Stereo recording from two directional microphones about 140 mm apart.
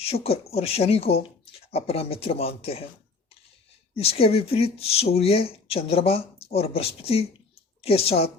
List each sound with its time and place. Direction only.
0.0 s speech: 45° left (ahead or behind)
3.9 s a woman's voice: 45° left (ahead or behind)